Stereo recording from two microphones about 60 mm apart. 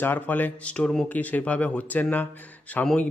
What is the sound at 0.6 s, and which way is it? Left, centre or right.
A man's voice, centre.